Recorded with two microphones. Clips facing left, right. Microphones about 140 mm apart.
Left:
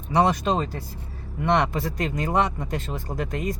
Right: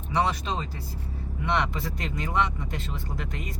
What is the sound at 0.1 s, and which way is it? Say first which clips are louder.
Speech: left 6 dB; 45° left (ahead or behind).